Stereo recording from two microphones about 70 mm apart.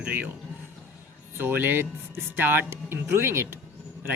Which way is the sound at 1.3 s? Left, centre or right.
Right.